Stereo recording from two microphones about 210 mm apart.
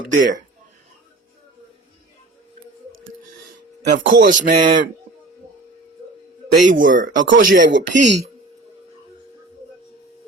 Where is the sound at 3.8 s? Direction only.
40° right (ahead or behind).